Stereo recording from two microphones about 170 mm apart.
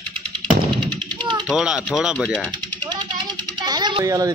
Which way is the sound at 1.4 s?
5° right (ahead or behind).